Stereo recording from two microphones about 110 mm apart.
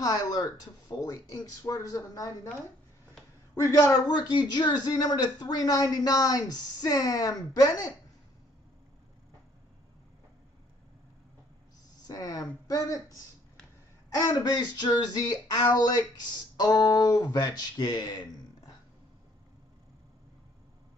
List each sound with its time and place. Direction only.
0.0 s speech: 35° left (ahead or behind)
3.5 s a woman's voice: 30° left (ahead or behind)
4.1 s speech: 40° left (ahead or behind)
12.1 s speech: 35° left (ahead or behind)